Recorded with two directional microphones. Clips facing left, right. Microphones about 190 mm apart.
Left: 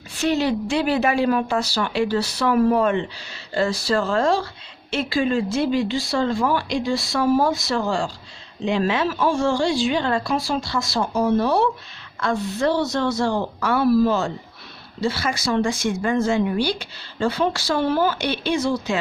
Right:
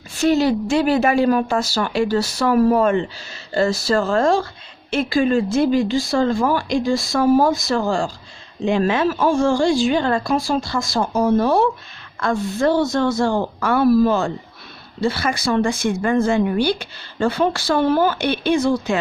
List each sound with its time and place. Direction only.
0.2 s speech: 45° right (ahead or behind)